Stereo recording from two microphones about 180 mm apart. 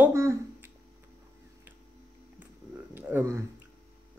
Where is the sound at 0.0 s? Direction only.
15° right (ahead or behind).